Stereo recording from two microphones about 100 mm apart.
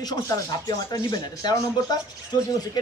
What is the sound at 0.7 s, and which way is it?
A woman's voice, 40° left (ahead or behind).